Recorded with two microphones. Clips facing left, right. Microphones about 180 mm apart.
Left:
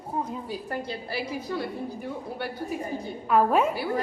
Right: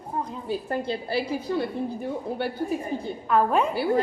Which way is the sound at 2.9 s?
25° right (ahead or behind).